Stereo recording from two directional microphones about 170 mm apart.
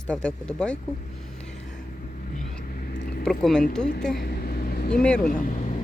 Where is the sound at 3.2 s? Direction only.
5° left (ahead or behind).